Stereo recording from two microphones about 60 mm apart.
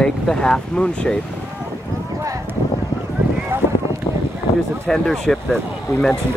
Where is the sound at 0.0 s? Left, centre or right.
Centre.